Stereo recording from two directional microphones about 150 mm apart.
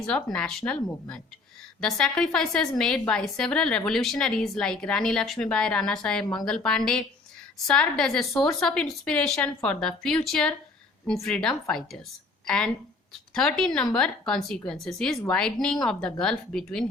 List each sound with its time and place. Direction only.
0.0 s a woman's voice: 5° left (ahead or behind)